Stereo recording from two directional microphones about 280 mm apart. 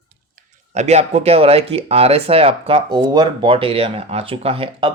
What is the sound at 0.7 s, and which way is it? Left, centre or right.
Speech, right.